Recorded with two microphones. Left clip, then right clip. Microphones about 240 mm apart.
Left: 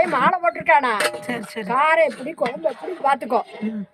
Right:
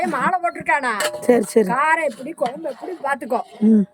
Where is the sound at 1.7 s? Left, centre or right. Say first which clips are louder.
Left 1 dB; centre.